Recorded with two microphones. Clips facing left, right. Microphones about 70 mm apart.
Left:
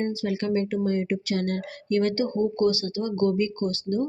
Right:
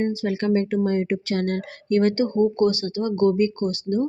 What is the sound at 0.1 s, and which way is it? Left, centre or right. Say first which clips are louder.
Speech: right 4 dB; right.